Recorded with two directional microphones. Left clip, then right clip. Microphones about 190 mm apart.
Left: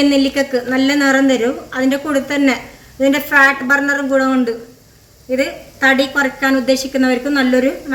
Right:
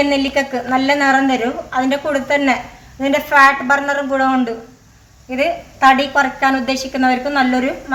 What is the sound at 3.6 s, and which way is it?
A woman's voice, 40° right (ahead or behind).